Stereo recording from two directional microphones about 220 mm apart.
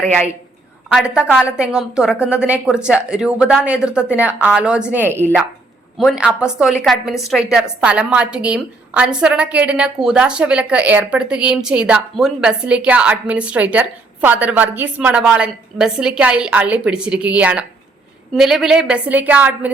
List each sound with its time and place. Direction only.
0.9 s a woman's voice: 5° right (ahead or behind)